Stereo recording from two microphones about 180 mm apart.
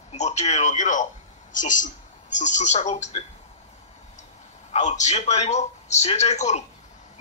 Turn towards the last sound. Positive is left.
turn(degrees=40)  # may be behind; listen again after turning